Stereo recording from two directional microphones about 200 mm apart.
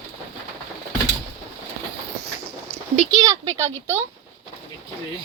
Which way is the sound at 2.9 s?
20° right (ahead or behind).